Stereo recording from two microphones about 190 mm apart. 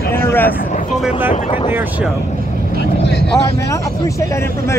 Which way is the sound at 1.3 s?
35° left (ahead or behind).